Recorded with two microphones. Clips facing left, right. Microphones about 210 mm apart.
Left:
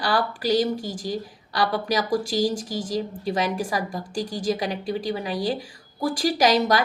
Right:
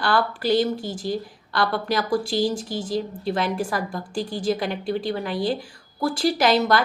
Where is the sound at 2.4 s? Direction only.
45° left (ahead or behind).